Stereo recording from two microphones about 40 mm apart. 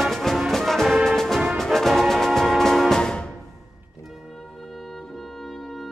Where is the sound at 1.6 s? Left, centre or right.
Centre.